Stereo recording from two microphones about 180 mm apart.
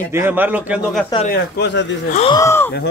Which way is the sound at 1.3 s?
75° left (ahead or behind).